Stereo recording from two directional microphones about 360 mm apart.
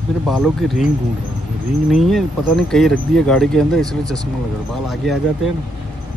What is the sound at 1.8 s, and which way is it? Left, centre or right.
Speech, centre.